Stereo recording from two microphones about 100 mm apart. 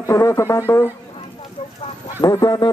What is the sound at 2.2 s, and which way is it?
Speech, 40° left (ahead or behind).